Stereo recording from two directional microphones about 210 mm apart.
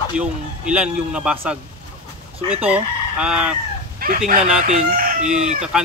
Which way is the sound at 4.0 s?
40° right (ahead or behind).